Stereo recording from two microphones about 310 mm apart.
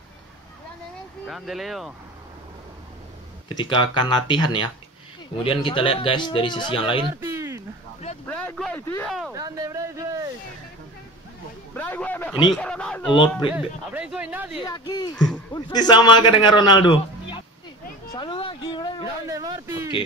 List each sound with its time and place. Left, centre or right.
1.2 s speech: centre
3.4 s a man's voice: centre
7.0 s a sound: centre
8.3 s speech: centre
9.3 s speech: centre
11.7 s speech: centre
13.1 s a man's voice: centre
13.6 s speech: centre
14.6 s a man's voice: centre
15.1 s a sound: centre
15.7 s a man's voice: centre
18.1 s a sound: centre
19.2 s speech: centre